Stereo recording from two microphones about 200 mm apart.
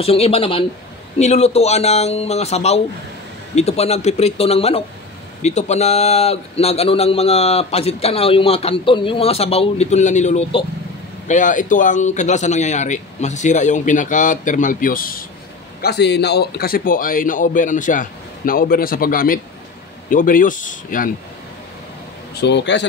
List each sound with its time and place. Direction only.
0.0 s a man's voice: 30° left (ahead or behind)
22.3 s a man's voice: 60° left (ahead or behind)